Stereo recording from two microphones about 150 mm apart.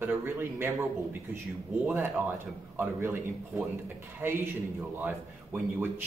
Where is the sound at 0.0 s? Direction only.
15° right (ahead or behind).